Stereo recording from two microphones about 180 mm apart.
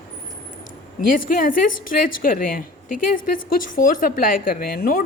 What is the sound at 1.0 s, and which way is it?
A woman's voice, 50° left (ahead or behind).